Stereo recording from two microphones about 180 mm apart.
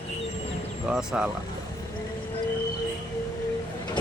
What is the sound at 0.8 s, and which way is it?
Speech, 5° right (ahead or behind).